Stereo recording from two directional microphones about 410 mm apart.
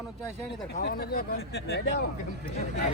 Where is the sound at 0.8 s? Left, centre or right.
Left.